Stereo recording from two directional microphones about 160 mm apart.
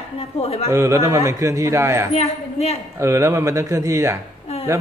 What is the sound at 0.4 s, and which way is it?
Speech, 40° left (ahead or behind).